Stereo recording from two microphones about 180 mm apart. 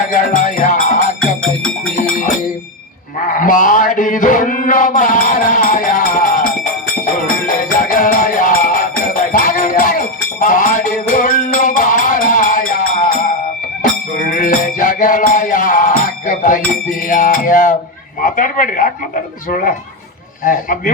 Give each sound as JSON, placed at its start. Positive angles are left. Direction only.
{"t": 0.1, "sound": "music", "side_deg": 45}
{"t": 1.6, "sound": "music", "side_deg": 5}
{"t": 3.3, "sound": "mantra", "side_deg": 50}
{"t": 7.0, "sound": "music", "side_deg": 50}
{"t": 18.2, "sound": "a man's voice", "side_deg": 50}
{"t": 20.4, "sound": "speech", "side_deg": 45}